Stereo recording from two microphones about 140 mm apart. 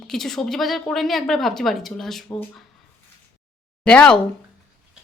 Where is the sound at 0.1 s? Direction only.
5° left (ahead or behind).